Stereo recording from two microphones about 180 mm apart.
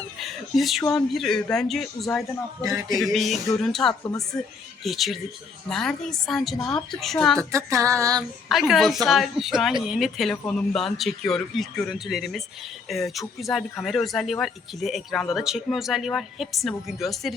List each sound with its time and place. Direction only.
0.2 s speech: centre (ahead or behind)
7.3 s music: 15° right (ahead or behind)
8.4 s speech: centre (ahead or behind)